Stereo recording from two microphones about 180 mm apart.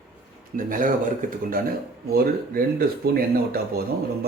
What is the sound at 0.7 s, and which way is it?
A man's voice, 45° right (ahead or behind).